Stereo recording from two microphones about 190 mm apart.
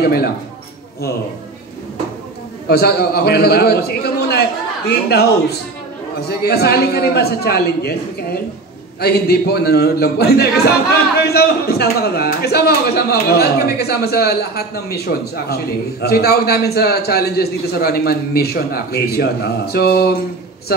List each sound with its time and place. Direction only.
0.0 s a man's voice: 55° left (ahead or behind)
2.7 s a man's voice: 55° left (ahead or behind)